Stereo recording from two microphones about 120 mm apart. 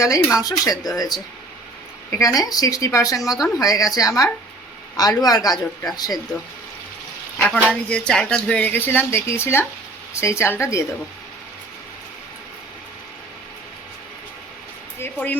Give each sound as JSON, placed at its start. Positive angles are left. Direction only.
{"t": 0.0, "sound": "speech", "side_deg": 25}
{"t": 3.2, "sound": "a woman's voice", "side_deg": -5}
{"t": 3.6, "sound": "speech", "side_deg": 30}
{"t": 7.3, "sound": "speech", "side_deg": 10}
{"t": 14.9, "sound": "speech", "side_deg": 15}